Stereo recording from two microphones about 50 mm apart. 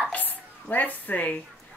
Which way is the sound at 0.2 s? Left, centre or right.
Left.